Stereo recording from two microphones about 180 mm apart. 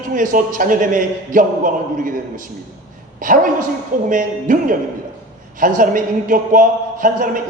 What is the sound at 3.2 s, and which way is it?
A man's voice, 50° right (ahead or behind).